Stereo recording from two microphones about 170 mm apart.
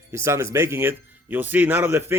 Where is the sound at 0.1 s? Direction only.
15° right (ahead or behind).